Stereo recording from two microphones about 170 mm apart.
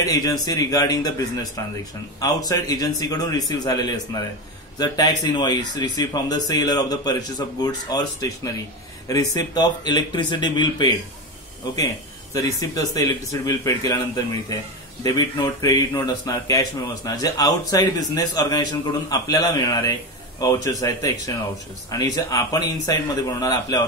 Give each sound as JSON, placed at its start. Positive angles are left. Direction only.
{"t": 0.0, "sound": "speech", "side_deg": 20}
{"t": 12.4, "sound": "speech", "side_deg": 20}